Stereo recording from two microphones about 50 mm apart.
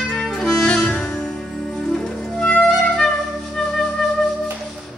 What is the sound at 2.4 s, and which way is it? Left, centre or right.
Music, left.